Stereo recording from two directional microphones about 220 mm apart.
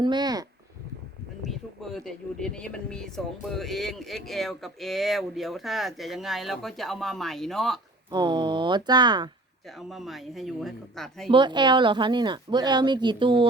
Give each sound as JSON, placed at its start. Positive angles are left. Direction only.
{"t": 0.0, "sound": "speech", "side_deg": -20}
{"t": 1.5, "sound": "speech", "side_deg": 0}
{"t": 8.1, "sound": "speech", "side_deg": -20}
{"t": 9.6, "sound": "speech", "side_deg": 0}
{"t": 11.3, "sound": "speech", "side_deg": -20}